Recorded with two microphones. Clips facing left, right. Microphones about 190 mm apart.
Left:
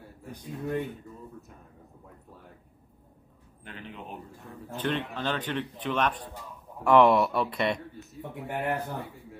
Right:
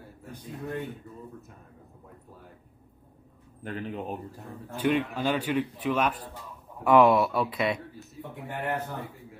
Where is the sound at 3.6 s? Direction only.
45° right (ahead or behind).